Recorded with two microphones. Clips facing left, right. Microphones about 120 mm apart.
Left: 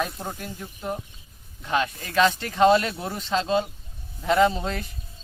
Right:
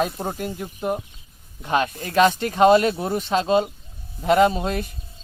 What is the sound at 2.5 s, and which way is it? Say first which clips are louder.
Speech: right 3 dB; 15° right (ahead or behind).